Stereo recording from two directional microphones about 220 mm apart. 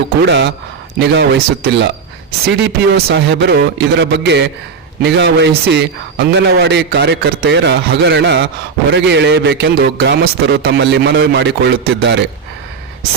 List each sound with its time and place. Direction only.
0.3 s a man's voice: 50° right (ahead or behind)